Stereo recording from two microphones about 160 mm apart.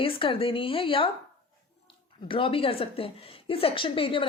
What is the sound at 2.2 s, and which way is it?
A woman's voice, 35° left (ahead or behind).